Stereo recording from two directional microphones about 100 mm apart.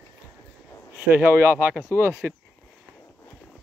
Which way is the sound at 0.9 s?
20° right (ahead or behind).